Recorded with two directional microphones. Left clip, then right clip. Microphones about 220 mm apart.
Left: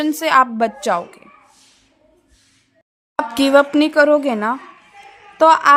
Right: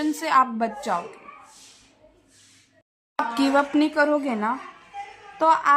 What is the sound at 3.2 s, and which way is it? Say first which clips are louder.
A woman's voice: left 8 dB; 40° left (ahead or behind).